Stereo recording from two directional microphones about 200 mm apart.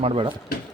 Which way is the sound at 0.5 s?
50° left (ahead or behind).